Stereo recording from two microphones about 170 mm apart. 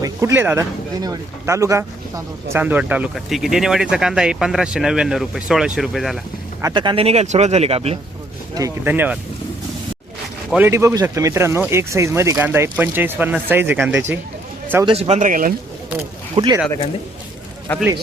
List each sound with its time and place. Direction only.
0.0 s speech: 20° right (ahead or behind); by 6.1 s centre (ahead or behind)
6.6 s speech: 25° right (ahead or behind)
8.5 s speech: 15° right (ahead or behind)
10.5 s speech: 15° right (ahead or behind)
14.8 s speech: 35° right (ahead or behind); by 15.5 s 50° right (ahead or behind)
16.3 s speech: 30° right (ahead or behind)
17.7 s a man's voice: 10° left (ahead or behind)